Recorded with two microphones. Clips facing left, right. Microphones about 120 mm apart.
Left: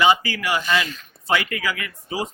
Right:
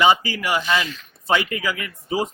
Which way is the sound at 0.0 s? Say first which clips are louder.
Right 1 dB; 20° right (ahead or behind).